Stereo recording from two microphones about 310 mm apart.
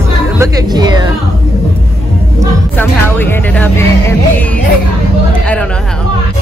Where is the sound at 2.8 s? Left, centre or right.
Centre.